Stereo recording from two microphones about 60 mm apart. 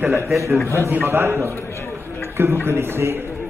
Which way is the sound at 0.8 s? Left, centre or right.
Right.